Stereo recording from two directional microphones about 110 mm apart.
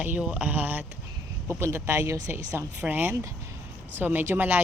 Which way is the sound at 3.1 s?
25° right (ahead or behind).